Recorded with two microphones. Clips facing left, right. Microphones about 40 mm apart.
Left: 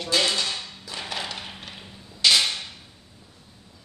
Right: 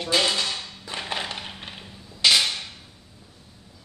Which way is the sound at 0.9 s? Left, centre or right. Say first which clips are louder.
Right 2 dB; right.